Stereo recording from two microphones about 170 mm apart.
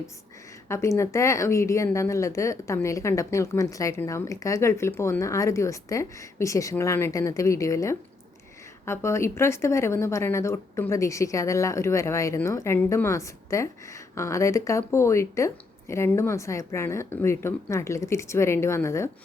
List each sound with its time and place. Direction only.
0.7 s a woman's voice: 15° left (ahead or behind)